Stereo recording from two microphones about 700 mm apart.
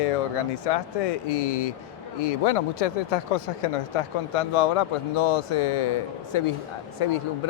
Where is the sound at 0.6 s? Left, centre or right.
Left.